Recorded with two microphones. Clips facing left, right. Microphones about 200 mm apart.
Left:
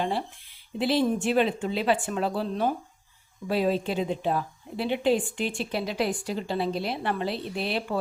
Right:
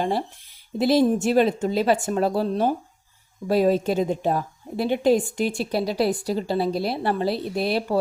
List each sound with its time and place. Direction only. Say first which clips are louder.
0.0 s a woman's voice: right 4 dB; 40° right (ahead or behind)